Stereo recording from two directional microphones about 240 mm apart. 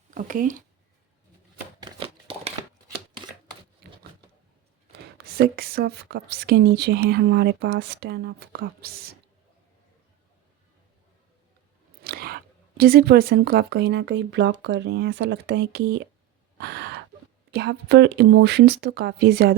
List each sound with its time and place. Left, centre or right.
0.1 s speech: right
1.8 s a sound: right
3.8 s a sound: right
4.9 s speech: right
12.0 s speech: right
16.6 s gasp: right
17.5 s speech: right